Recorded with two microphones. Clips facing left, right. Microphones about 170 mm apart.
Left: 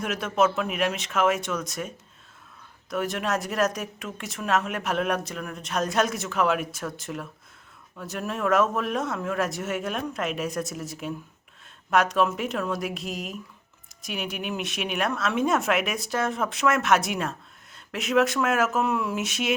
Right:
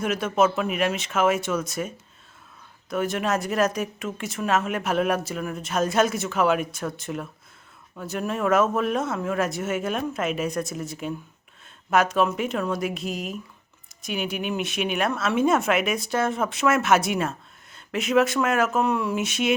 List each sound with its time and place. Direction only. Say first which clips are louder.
0.0 s a woman's voice: right 2 dB; centre (ahead or behind)
2.9 s a woman's voice: right 2 dB; centre (ahead or behind)